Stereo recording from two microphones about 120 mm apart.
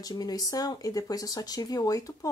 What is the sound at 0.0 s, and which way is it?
Speech, 30° left (ahead or behind).